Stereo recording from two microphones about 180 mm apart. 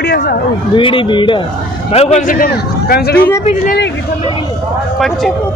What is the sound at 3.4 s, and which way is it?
Speech, 45° left (ahead or behind).